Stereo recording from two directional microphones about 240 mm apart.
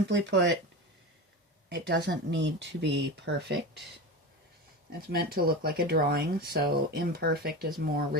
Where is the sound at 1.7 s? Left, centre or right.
Right.